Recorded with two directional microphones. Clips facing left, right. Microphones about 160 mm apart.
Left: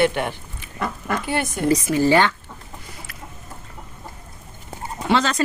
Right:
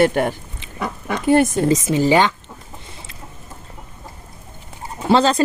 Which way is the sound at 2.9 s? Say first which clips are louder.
Even; 25° right (ahead or behind).